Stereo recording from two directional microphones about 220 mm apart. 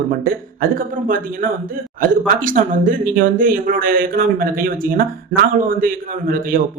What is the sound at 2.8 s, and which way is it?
Speech, 40° right (ahead or behind).